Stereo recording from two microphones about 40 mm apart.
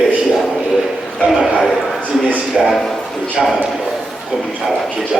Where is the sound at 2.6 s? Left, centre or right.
Centre.